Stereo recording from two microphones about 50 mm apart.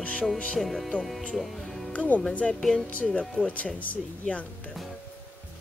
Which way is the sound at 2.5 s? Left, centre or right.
Centre.